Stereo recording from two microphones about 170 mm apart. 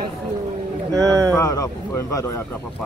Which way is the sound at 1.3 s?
20° left (ahead or behind).